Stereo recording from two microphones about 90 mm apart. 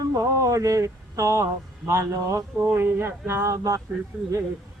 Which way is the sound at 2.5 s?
20° right (ahead or behind).